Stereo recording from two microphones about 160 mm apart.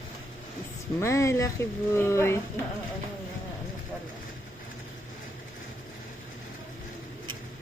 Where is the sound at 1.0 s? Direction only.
20° left (ahead or behind).